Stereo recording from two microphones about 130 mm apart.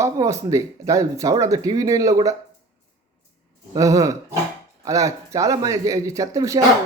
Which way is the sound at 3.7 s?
25° right (ahead or behind).